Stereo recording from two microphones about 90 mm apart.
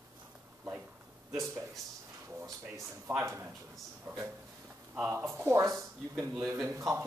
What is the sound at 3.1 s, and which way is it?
Speech, 30° right (ahead or behind).